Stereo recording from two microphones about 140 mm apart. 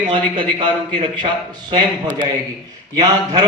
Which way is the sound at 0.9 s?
35° right (ahead or behind).